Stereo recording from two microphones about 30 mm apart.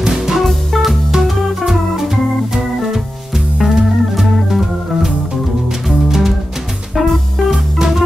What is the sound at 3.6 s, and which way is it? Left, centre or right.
Music, centre.